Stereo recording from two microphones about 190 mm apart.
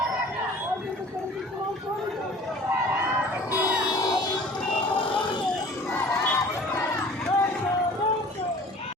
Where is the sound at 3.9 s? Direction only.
20° left (ahead or behind).